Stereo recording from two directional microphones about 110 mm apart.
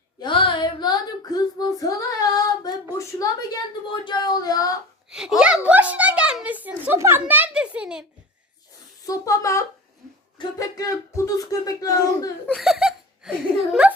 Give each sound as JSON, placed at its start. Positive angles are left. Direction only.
{"t": 0.2, "sound": "female singing", "side_deg": 50}
{"t": 4.0, "sound": "speech", "side_deg": 40}
{"t": 5.4, "sound": "a woman's voice", "side_deg": -10}
{"t": 9.0, "sound": "speech", "side_deg": 30}
{"t": 12.5, "sound": "speech", "side_deg": -5}